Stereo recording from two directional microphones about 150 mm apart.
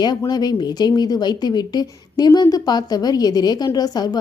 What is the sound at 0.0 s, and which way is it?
A woman's voice, 30° left (ahead or behind).